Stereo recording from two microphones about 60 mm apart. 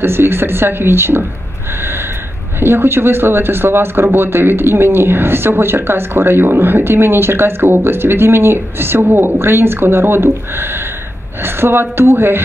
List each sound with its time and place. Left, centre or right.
0.0 s speech: right
2.6 s speech: right